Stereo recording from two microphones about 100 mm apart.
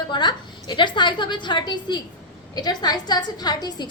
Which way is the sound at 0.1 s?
50° left (ahead or behind).